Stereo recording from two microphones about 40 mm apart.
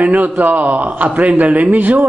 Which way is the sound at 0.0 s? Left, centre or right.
Right.